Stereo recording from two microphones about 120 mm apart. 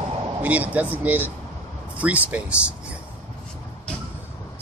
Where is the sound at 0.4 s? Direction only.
10° right (ahead or behind).